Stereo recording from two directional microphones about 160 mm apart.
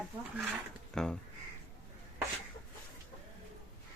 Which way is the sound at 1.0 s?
5° left (ahead or behind).